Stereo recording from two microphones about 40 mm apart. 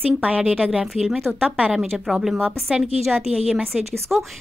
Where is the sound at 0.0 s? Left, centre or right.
Right.